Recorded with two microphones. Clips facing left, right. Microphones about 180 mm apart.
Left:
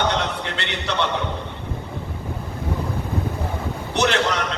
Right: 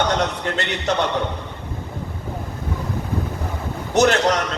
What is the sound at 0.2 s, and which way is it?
Speech, 45° right (ahead or behind).